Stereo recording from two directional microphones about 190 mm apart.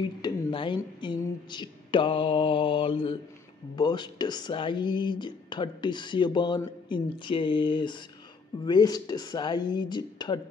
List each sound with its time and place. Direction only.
0.2 s speech: 25° left (ahead or behind)